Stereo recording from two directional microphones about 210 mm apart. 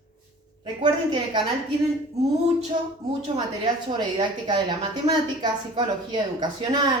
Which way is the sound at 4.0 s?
20° right (ahead or behind).